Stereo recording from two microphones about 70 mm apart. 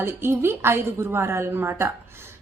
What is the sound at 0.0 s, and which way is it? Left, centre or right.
A woman's voice, right.